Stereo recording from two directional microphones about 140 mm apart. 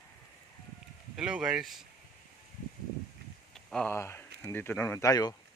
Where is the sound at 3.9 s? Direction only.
15° left (ahead or behind).